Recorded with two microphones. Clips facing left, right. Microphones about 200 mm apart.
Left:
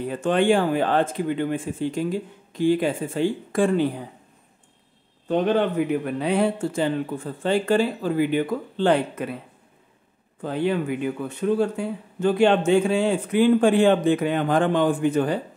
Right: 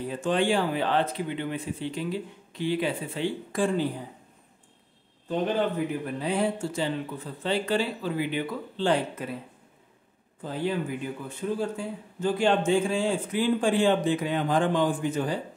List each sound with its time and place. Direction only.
0.1 s speech: 60° left (ahead or behind)
5.3 s speech: 70° left (ahead or behind)
10.4 s speech: 65° left (ahead or behind)